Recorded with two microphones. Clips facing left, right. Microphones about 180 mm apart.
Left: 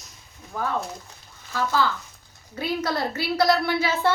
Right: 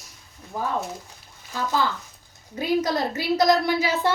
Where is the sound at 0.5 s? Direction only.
15° right (ahead or behind).